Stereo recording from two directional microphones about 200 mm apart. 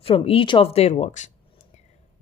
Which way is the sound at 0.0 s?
30° left (ahead or behind).